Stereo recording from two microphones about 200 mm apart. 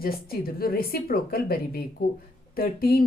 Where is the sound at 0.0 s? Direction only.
45° left (ahead or behind).